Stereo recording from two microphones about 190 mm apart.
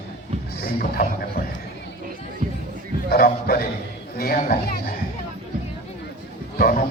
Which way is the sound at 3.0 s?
50° left (ahead or behind).